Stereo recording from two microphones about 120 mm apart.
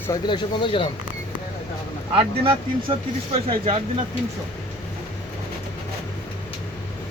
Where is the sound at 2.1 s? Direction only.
50° right (ahead or behind).